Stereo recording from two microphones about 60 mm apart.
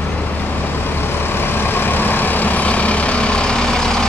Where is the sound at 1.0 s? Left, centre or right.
Left.